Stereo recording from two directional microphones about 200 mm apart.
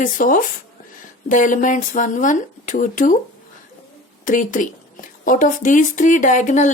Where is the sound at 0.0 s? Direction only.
40° left (ahead or behind).